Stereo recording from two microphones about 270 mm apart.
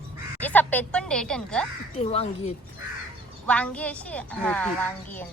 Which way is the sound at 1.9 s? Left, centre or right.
Left.